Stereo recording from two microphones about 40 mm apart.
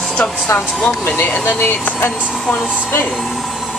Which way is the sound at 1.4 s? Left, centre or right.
Left.